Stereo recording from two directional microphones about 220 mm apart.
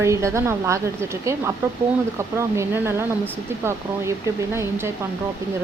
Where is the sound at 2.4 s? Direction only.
10° right (ahead or behind).